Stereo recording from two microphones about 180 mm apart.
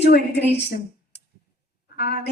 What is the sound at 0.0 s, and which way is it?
Speech, 70° left (ahead or behind).